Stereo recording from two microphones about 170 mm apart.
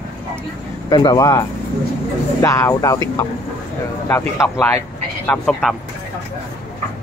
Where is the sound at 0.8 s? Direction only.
25° left (ahead or behind).